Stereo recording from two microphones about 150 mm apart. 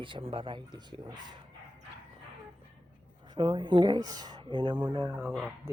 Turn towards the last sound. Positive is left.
turn(degrees=-5)  # may be behind; listen again after turning